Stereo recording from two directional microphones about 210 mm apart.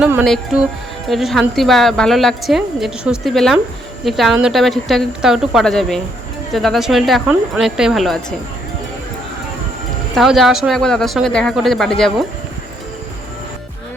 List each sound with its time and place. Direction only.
0.0 s speech: 10° right (ahead or behind)
10.2 s speech: centre (ahead or behind)